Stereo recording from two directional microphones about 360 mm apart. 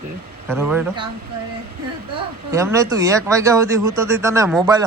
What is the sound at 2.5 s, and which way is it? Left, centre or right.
Speech, centre.